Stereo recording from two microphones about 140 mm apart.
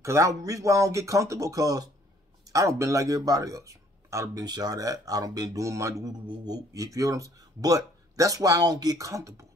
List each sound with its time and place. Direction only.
0.0 s speech: 20° right (ahead or behind)